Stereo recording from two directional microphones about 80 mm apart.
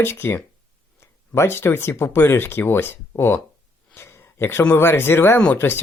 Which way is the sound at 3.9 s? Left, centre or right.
Left.